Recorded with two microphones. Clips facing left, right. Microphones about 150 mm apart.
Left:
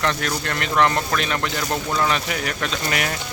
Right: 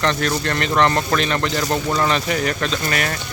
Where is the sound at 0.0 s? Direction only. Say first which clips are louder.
Right 3 dB; 5° left (ahead or behind).